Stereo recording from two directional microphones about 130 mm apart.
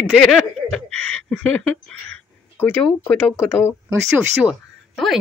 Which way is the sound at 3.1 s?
10° left (ahead or behind).